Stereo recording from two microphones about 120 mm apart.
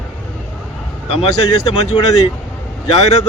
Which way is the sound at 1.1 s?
55° left (ahead or behind).